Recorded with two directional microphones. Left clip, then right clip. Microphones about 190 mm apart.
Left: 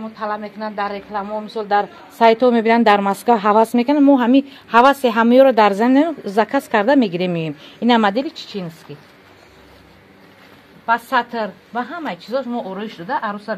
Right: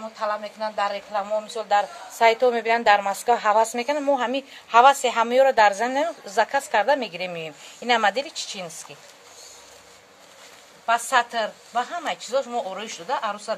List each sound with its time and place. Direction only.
0.2 s a man's voice: 20° left (ahead or behind); by 7.5 s 45° left (ahead or behind)
7.8 s a woman's voice: 35° left (ahead or behind)
8.4 s a woman's voice: 15° left (ahead or behind)
10.9 s a woman's voice: 15° left (ahead or behind)